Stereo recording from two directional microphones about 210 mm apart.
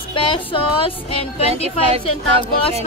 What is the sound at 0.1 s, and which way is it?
Speech, 25° left (ahead or behind).